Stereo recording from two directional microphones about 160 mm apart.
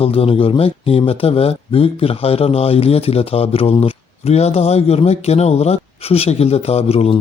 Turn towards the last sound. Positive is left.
turn(degrees=40)  # may be behind; listen again after turning